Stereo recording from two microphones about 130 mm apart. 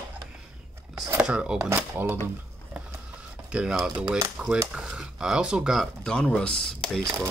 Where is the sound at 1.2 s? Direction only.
5° right (ahead or behind).